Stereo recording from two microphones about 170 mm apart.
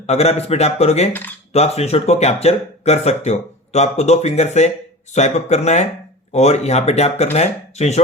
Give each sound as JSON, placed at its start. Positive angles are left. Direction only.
{"t": 0.0, "sound": "speech", "side_deg": 40}